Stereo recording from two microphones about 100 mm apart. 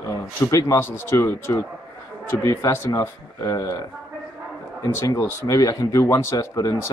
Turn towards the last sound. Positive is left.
turn(degrees=35)  # may be behind; listen again after turning